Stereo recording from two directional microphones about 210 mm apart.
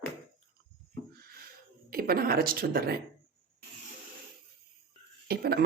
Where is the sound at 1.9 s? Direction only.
45° right (ahead or behind).